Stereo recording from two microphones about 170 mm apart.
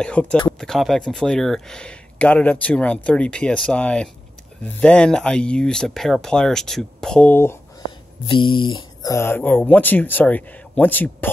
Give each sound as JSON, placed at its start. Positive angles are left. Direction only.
{"t": 0.0, "sound": "speech", "side_deg": 5}
{"t": 8.3, "sound": "speech", "side_deg": 30}
{"t": 9.1, "sound": "speech", "side_deg": 15}